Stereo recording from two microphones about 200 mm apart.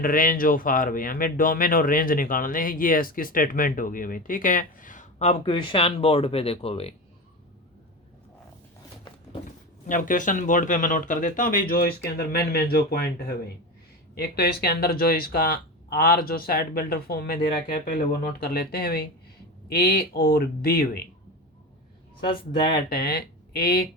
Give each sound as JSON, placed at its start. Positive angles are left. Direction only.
{"t": 0.0, "sound": "speech", "side_deg": 45}
{"t": 9.8, "sound": "speech", "side_deg": 40}
{"t": 22.3, "sound": "speech", "side_deg": 25}
{"t": 22.9, "sound": "speech", "side_deg": 50}